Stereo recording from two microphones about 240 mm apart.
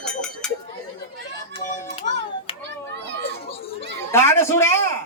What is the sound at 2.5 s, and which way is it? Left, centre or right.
Children playing, left.